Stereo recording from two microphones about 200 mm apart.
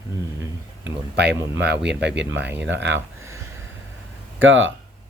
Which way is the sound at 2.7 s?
60° right (ahead or behind).